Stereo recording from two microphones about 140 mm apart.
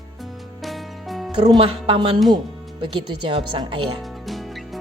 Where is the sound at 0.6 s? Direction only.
Centre (ahead or behind).